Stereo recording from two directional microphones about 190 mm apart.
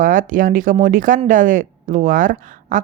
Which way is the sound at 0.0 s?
45° right (ahead or behind).